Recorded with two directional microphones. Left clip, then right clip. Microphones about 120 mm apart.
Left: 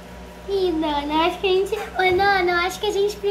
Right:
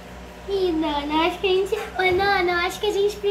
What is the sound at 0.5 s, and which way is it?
A child's voice, 15° left (ahead or behind).